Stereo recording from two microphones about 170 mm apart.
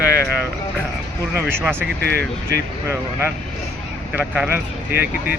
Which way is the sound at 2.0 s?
70° right (ahead or behind).